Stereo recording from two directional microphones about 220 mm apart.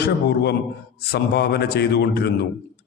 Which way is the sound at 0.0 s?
50° left (ahead or behind).